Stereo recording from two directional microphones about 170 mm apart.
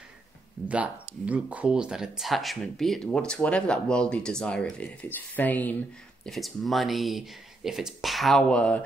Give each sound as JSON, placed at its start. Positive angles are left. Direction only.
{"t": 0.7, "sound": "speech", "side_deg": -5}